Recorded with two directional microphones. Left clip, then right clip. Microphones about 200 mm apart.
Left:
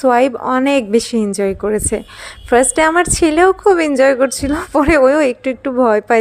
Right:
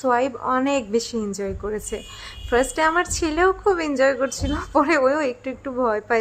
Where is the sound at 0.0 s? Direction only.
30° left (ahead or behind).